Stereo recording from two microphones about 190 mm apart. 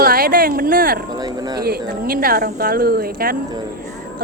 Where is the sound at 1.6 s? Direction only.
55° right (ahead or behind).